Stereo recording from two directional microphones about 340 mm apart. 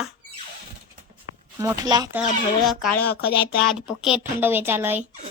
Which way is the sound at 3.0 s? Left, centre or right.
Left.